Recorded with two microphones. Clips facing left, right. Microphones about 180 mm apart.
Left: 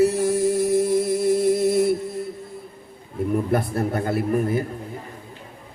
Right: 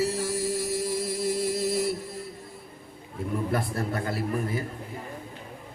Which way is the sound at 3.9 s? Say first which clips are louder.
Left 6 dB; 55° left (ahead or behind).